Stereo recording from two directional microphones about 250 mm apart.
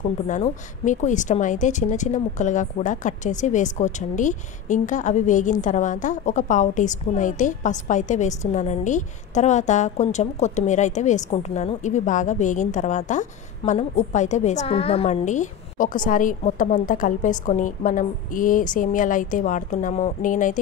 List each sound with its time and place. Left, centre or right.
0.3 s a woman's voice: left